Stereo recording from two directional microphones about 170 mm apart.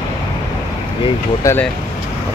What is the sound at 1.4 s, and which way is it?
Speech, 15° left (ahead or behind).